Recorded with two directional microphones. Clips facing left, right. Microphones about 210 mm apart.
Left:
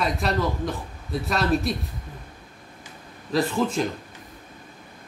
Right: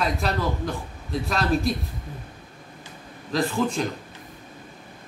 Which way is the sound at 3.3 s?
5° left (ahead or behind).